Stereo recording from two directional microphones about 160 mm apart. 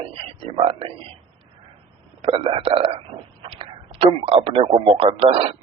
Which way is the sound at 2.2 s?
35° right (ahead or behind).